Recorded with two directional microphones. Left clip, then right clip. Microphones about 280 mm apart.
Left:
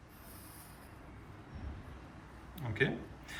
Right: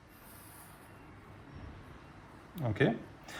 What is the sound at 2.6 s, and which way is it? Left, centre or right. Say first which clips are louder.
Speech: right 3 dB; centre.